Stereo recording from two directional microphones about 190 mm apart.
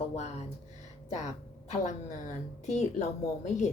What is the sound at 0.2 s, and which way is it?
Speech, 35° left (ahead or behind).